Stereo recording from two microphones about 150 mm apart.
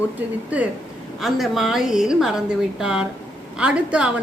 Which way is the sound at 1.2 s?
Centre (ahead or behind).